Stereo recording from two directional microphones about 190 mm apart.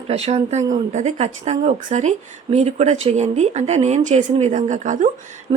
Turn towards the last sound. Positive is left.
turn(degrees=-25)  # may be behind; listen again after turning